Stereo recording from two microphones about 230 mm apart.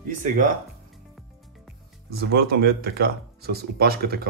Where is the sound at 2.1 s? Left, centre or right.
Right.